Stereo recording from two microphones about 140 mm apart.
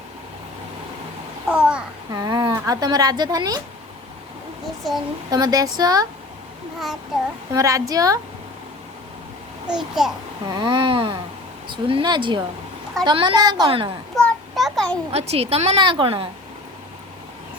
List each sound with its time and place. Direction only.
1.5 s babbling: 5° right (ahead or behind)
2.1 s a sound: 25° right (ahead or behind)
2.6 s a woman's voice: 25° right (ahead or behind)
4.8 s speech: centre (ahead or behind)
5.3 s a woman's voice: 25° right (ahead or behind)
7.5 s a woman's voice: 25° right (ahead or behind)
9.6 s a child's voice: 5° right (ahead or behind)
10.4 s a woman's voice: 30° right (ahead or behind)
14.2 s a sound: 5° left (ahead or behind)
15.1 s a woman's voice: 50° right (ahead or behind)
15.8 s a woman's voice: 35° right (ahead or behind)